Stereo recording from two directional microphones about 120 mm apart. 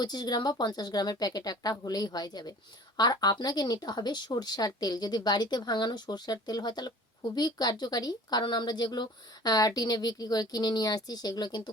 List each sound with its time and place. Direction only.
0.0 s a woman's voice: 35° left (ahead or behind)